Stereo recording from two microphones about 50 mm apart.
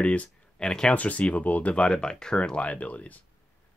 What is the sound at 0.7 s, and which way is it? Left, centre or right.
Speech, centre.